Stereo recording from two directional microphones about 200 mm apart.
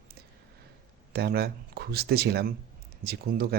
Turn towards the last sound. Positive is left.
turn(degrees=-50)  # may be behind; listen again after turning